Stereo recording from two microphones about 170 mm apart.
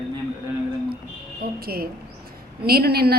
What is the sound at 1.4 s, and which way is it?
Speech, 65° right (ahead or behind).